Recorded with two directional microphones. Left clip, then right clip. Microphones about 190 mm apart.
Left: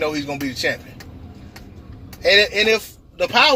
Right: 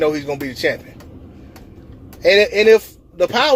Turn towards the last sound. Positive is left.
turn(degrees=-30)  # may be behind; listen again after turning